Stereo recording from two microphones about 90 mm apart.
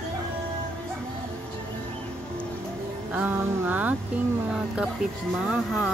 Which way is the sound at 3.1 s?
20° right (ahead or behind).